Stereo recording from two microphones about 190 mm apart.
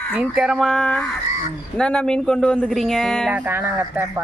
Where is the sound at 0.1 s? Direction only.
5° right (ahead or behind).